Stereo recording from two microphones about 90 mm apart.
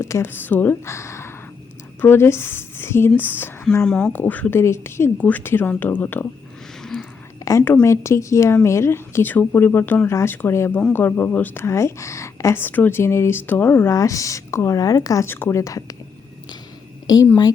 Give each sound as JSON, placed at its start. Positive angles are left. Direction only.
{"t": 0.0, "sound": "a woman's voice", "side_deg": 30}
{"t": 3.8, "sound": "speech", "side_deg": 10}
{"t": 4.1, "sound": "a woman's voice", "side_deg": 20}
{"t": 4.6, "sound": "a woman's voice", "side_deg": 30}
{"t": 5.1, "sound": "a woman's voice", "side_deg": 20}
{"t": 7.6, "sound": "a woman's voice", "side_deg": 25}
{"t": 12.5, "sound": "a woman's voice", "side_deg": 20}
{"t": 13.9, "sound": "speech", "side_deg": 35}
{"t": 15.3, "sound": "speech", "side_deg": 25}